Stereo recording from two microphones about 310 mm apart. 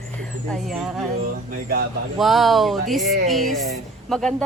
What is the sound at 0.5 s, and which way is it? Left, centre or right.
Speech, centre.